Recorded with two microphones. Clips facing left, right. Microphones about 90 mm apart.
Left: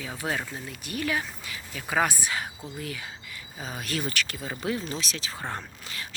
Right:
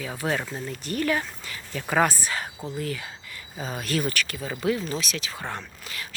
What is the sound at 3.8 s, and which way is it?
Speech, 20° left (ahead or behind).